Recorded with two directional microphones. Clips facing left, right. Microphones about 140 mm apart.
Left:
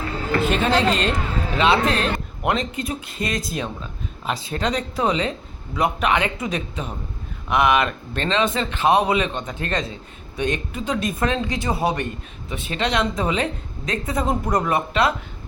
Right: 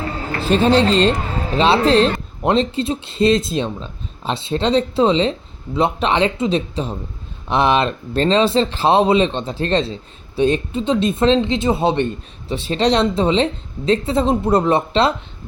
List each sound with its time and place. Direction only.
0.3 s speech: 30° right (ahead or behind)